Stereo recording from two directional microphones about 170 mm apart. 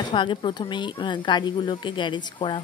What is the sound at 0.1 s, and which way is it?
A woman's voice, 30° left (ahead or behind).